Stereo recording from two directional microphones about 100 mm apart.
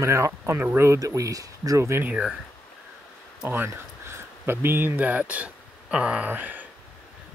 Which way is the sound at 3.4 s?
20° right (ahead or behind).